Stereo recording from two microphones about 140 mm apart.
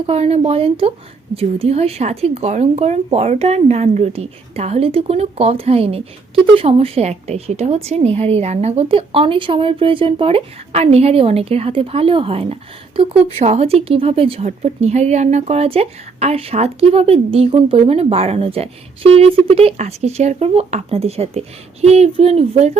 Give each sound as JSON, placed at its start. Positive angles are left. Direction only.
{"t": 0.0, "sound": "a woman's voice", "side_deg": -45}
{"t": 13.3, "sound": "a woman's voice", "side_deg": -50}